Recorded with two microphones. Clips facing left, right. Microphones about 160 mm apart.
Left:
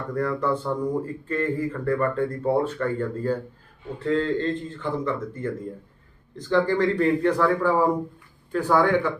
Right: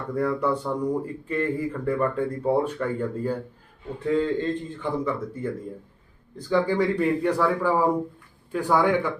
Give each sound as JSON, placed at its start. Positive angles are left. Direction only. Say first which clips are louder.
{"t": 0.1, "sound": "speech", "louder": "right 1 dB", "side_deg": -10}